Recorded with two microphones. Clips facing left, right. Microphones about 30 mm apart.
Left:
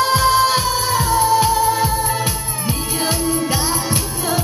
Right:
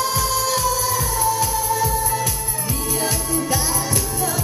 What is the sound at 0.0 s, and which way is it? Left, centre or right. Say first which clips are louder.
Music: left 7 dB; left.